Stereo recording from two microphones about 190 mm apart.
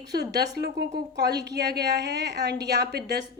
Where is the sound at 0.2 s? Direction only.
55° right (ahead or behind).